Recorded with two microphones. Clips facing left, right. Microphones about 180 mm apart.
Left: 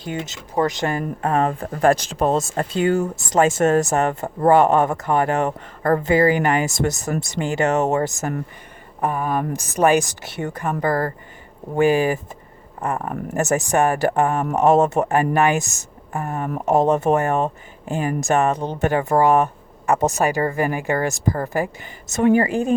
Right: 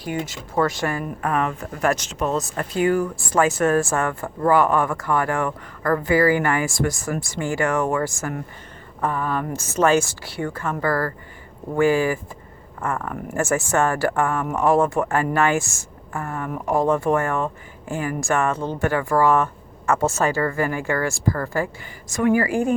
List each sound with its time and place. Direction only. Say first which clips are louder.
0.0 s a woman's voice: right 1 dB; 25° left (ahead or behind)